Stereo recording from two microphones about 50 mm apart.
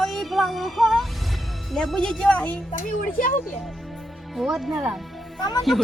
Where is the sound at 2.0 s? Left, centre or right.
Centre.